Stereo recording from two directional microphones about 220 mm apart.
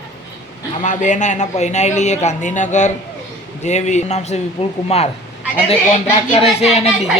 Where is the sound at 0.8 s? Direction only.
35° left (ahead or behind).